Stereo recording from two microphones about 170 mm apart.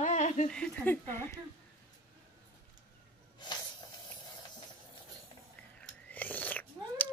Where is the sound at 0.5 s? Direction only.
10° left (ahead or behind).